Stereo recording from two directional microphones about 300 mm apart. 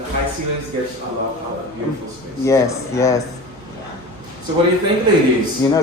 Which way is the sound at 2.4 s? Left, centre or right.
Centre.